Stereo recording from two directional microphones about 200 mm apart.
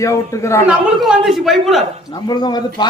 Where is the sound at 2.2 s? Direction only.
20° left (ahead or behind).